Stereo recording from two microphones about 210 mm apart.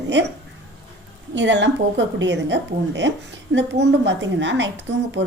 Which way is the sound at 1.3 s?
60° right (ahead or behind).